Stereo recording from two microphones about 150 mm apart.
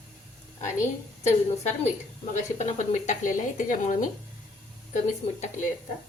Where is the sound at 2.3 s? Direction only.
50° left (ahead or behind).